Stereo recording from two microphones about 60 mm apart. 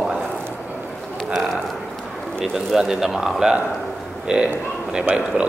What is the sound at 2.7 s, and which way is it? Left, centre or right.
A man's voice, centre.